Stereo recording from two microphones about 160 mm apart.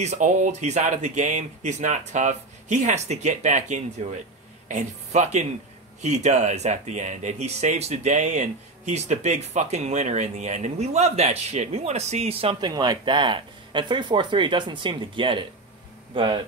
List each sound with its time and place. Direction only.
0.0 s speech: 50° right (ahead or behind)
12.5 s speech: 25° right (ahead or behind)